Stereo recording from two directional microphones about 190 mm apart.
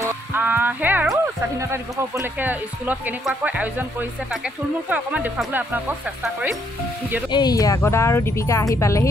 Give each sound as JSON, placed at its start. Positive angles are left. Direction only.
{"t": 0.0, "sound": "speech", "side_deg": -10}
{"t": 7.2, "sound": "speech", "side_deg": 20}